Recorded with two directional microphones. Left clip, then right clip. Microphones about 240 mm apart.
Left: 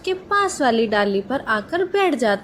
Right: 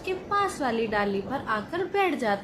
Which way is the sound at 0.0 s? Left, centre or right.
Left.